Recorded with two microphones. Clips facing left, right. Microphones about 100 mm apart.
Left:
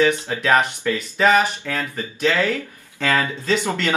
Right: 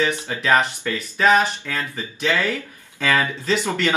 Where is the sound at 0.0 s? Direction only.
20° left (ahead or behind).